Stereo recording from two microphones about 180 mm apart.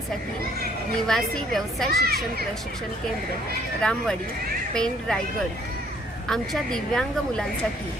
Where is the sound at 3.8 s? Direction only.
5° left (ahead or behind).